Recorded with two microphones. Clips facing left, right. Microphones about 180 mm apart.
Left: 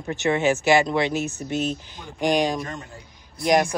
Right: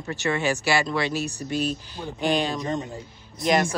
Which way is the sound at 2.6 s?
20° right (ahead or behind).